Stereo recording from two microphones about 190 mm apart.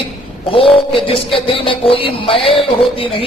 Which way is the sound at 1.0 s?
30° left (ahead or behind).